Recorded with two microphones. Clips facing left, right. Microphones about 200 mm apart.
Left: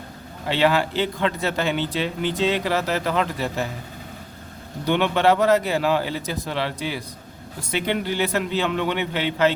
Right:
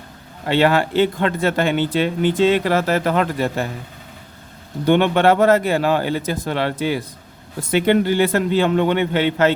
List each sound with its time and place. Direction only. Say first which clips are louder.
0.4 s a man's voice: right 4 dB; 50° right (ahead or behind)
4.9 s a man's voice: right 4 dB; 55° right (ahead or behind)